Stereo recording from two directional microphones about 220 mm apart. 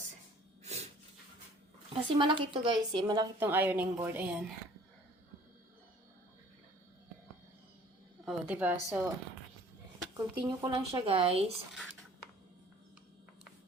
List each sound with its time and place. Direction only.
0.6 s snort: 30° right (ahead or behind)
2.1 s a woman's voice: 20° right (ahead or behind)
8.2 s a woman's voice: 5° right (ahead or behind)
10.2 s speech: 15° right (ahead or behind)